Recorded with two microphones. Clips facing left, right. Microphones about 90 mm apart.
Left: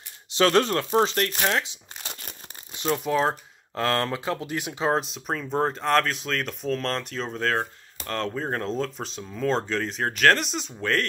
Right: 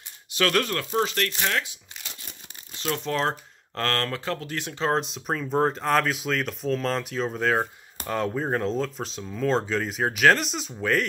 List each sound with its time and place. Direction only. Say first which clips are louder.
0.3 s speech: left 4 dB; 25° left (ahead or behind)
2.0 s crumpling: left 4 dB; 45° left (ahead or behind)
2.9 s speech: left 3 dB; 10° left (ahead or behind)